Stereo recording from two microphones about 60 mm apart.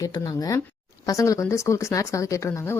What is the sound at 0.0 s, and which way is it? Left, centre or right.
Speech, left.